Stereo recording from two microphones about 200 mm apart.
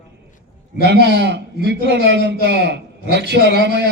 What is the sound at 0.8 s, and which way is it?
A man's voice, 55° right (ahead or behind).